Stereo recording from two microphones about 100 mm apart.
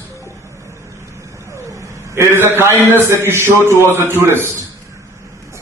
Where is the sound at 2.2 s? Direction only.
25° right (ahead or behind).